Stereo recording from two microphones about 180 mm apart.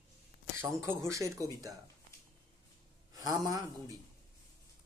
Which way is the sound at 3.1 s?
20° right (ahead or behind).